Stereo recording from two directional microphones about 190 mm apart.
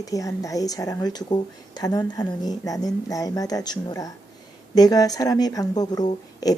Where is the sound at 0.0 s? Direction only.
15° left (ahead or behind).